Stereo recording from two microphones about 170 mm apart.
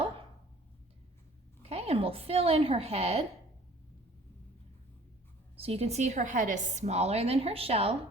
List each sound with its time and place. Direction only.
1.7 s a woman's voice: 35° right (ahead or behind)
5.5 s a woman's voice: 35° right (ahead or behind)